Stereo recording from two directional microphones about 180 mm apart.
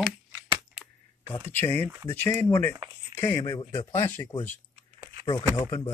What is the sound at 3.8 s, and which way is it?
Speech, 10° left (ahead or behind).